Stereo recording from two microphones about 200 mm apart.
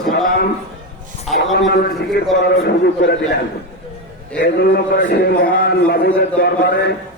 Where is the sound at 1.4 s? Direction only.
65° left (ahead or behind).